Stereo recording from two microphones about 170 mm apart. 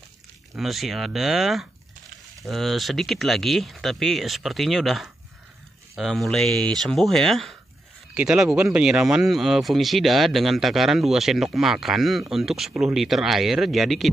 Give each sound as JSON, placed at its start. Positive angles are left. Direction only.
{"t": 0.6, "sound": "speech", "side_deg": 0}